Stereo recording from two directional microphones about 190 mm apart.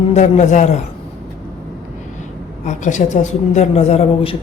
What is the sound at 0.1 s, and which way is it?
Speech, 40° left (ahead or behind).